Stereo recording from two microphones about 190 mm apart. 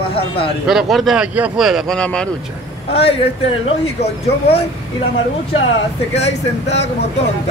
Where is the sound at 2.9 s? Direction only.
30° left (ahead or behind).